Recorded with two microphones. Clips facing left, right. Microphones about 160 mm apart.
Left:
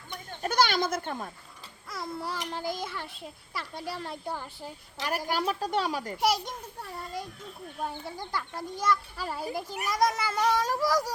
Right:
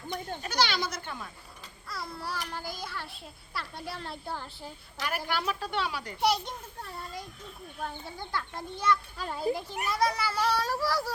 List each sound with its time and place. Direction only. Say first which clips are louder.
0.4 s speech: left 5 dB; 50° left (ahead or behind)
1.9 s a child's voice: left 2 dB; 20° left (ahead or behind)
5.0 s speech: left 3 dB; 40° left (ahead or behind)
6.1 s a child's voice: right 1 dB; 10° left (ahead or behind)
7.8 s a child's voice: left 3 dB; 10° left (ahead or behind)